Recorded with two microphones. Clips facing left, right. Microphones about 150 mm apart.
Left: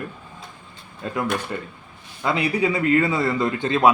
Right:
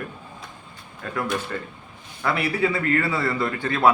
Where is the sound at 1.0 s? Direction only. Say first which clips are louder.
Left 3 dB; 25° left (ahead or behind).